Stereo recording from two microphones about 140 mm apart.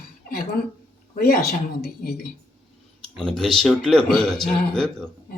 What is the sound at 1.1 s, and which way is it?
Speech, 90° left.